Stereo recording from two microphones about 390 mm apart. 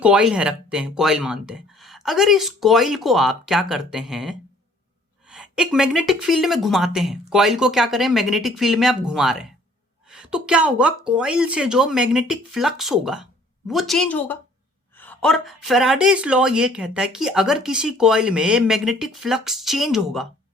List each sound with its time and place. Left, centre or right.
0.0 s speech: centre